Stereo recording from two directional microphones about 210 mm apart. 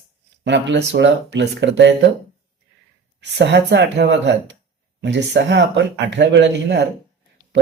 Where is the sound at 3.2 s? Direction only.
55° right (ahead or behind).